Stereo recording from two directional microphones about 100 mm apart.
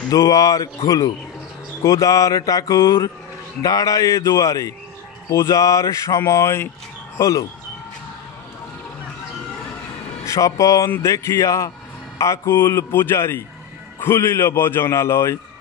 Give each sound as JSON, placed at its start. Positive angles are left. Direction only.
{"t": 0.1, "sound": "speech", "side_deg": 35}
{"t": 10.2, "sound": "a man's voice", "side_deg": 30}